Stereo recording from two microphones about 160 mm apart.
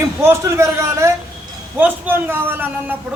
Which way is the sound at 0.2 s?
15° right (ahead or behind).